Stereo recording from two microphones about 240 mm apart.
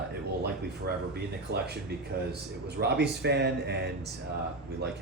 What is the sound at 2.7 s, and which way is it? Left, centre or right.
A man's voice, right.